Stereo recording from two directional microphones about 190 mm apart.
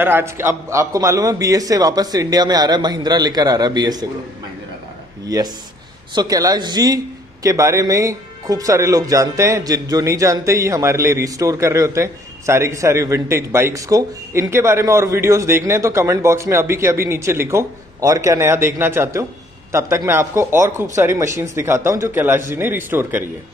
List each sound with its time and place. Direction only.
0.0 s a man's voice: 10° right (ahead or behind)
5.2 s a man's voice: 20° right (ahead or behind)